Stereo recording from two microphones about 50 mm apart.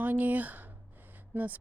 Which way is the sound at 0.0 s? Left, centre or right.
Right.